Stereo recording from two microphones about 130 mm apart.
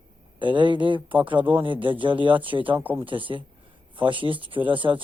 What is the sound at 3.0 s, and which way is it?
A man's voice, 40° right (ahead or behind).